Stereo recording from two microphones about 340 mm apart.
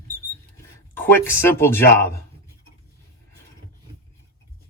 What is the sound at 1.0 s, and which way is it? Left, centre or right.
Speech, centre.